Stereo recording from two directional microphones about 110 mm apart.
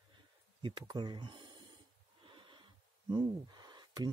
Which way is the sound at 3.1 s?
40° right (ahead or behind).